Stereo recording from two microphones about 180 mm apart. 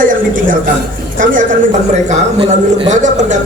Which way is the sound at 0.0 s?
50° right (ahead or behind).